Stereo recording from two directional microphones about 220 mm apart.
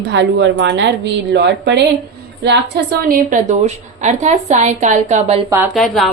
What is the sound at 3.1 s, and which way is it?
A woman's voice, 40° right (ahead or behind).